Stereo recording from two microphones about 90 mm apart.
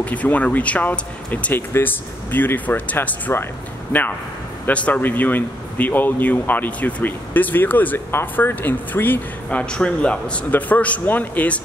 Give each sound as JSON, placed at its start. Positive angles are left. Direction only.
{"t": 0.0, "sound": "speech", "side_deg": 15}